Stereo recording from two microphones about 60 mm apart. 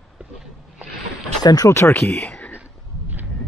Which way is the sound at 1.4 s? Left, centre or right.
Left.